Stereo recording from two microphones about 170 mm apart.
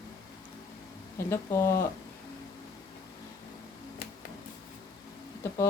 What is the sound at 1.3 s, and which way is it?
Speech, 15° left (ahead or behind).